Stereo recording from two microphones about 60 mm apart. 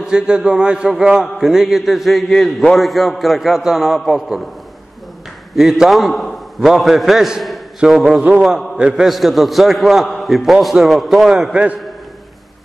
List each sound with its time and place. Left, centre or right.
0.0 s a man's voice: centre
5.6 s a man's voice: centre
8.7 s a man's voice: centre
9.0 s a man's voice: centre
11.5 s a man's voice: right